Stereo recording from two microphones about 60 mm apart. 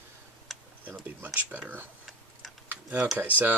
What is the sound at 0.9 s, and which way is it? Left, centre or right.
Speech, right.